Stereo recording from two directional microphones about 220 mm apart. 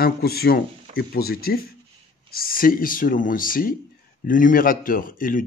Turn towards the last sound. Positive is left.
turn(degrees=40)  # may be behind; listen again after turning